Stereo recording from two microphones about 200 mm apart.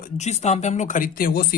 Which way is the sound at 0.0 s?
35° left (ahead or behind).